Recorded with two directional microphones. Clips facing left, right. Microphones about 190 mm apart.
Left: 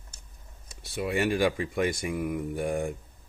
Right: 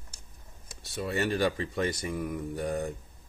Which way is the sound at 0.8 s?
10° left (ahead or behind).